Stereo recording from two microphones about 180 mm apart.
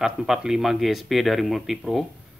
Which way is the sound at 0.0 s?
5° right (ahead or behind).